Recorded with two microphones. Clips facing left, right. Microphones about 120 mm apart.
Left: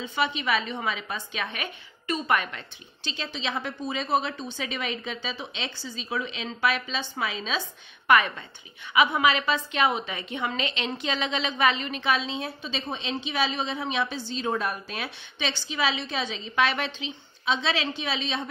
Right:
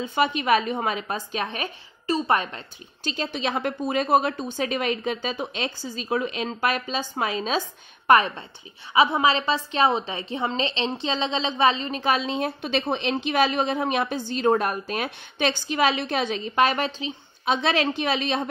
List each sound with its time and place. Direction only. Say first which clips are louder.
0.0 s a woman's voice: right 4 dB; 45° right (ahead or behind)